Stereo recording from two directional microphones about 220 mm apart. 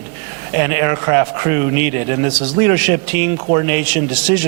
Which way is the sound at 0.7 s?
15° right (ahead or behind).